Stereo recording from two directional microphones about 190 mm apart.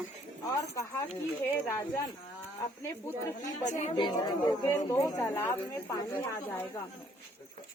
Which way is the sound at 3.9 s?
25° left (ahead or behind).